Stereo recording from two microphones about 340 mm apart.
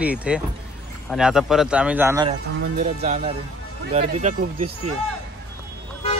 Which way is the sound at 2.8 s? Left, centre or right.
Centre.